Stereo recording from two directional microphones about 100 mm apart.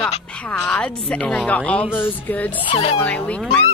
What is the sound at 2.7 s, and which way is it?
Speech, 70° left (ahead or behind).